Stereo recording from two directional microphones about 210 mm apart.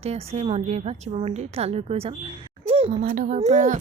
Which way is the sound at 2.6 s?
30° right (ahead or behind).